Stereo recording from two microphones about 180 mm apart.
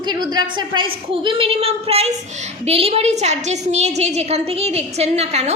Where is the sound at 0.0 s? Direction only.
25° right (ahead or behind).